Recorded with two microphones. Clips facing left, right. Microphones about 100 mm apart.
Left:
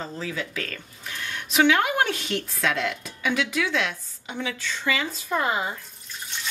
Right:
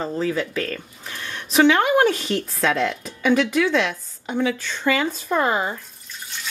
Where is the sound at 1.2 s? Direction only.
35° right (ahead or behind).